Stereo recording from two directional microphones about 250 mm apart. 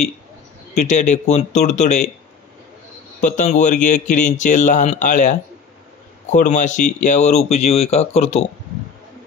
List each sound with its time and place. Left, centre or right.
0.7 s speech: left
3.2 s speech: left